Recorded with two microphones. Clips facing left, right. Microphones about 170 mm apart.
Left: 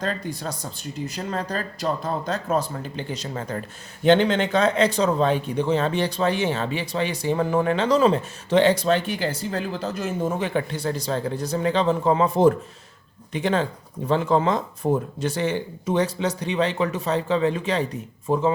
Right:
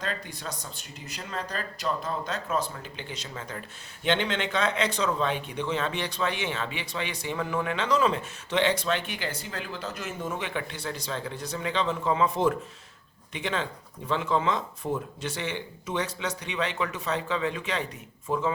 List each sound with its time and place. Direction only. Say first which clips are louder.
0.0 s speech: left 7 dB; 40° left (ahead or behind)